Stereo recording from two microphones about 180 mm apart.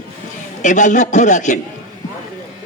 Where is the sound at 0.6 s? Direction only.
45° left (ahead or behind).